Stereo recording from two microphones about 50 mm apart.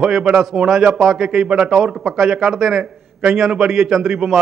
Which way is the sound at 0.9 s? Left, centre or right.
Centre.